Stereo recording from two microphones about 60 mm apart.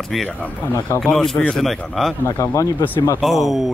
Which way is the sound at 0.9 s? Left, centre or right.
Left.